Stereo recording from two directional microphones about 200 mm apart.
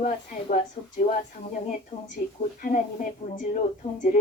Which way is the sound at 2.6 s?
40° left (ahead or behind).